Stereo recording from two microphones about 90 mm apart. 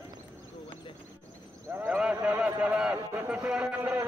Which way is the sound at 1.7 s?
20° right (ahead or behind).